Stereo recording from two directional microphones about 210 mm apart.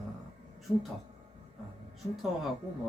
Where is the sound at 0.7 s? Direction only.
15° left (ahead or behind).